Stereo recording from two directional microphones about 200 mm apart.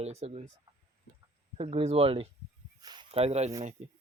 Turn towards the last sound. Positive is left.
turn(degrees=-30)  # may be behind; listen again after turning